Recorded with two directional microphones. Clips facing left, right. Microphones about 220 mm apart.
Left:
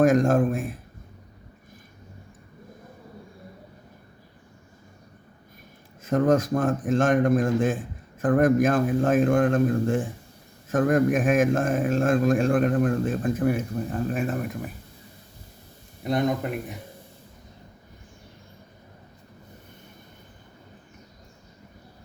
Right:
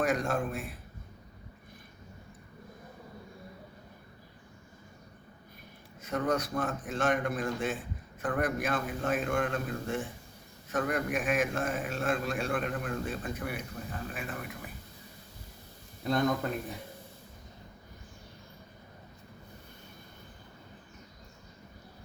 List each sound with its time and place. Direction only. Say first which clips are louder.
0.0 s a man's voice: left 11 dB; 45° left (ahead or behind)
6.0 s a man's voice: left 10 dB; 45° left (ahead or behind)
16.0 s speech: left 4 dB; 20° left (ahead or behind)